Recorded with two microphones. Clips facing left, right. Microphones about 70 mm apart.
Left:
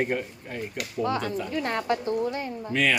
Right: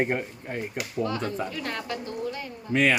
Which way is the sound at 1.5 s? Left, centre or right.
Left.